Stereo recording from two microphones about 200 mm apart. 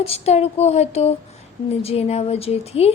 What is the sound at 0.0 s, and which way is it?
A woman's voice, 30° left (ahead or behind).